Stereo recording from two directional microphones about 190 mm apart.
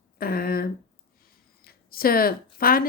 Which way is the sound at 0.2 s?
50° left (ahead or behind).